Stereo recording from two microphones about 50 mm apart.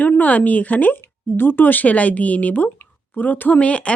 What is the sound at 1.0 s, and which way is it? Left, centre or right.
Speech, left.